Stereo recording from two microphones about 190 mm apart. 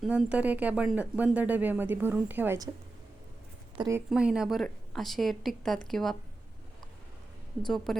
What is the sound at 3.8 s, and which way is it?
Speech, 15° right (ahead or behind).